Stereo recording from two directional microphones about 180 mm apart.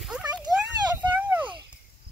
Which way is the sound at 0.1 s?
5° right (ahead or behind).